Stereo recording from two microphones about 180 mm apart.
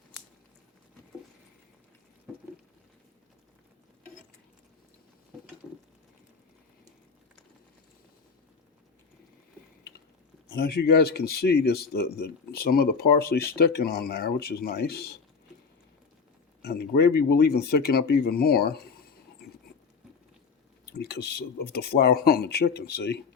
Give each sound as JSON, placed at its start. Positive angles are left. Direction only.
{"t": 10.5, "sound": "speech", "side_deg": 60}
{"t": 16.6, "sound": "speech", "side_deg": 60}
{"t": 20.9, "sound": "speech", "side_deg": 65}